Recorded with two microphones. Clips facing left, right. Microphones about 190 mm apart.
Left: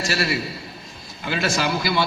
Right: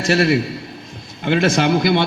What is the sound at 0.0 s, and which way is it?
A man's voice, 55° right (ahead or behind).